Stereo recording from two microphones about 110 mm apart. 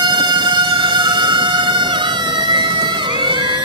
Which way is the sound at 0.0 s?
45° right (ahead or behind).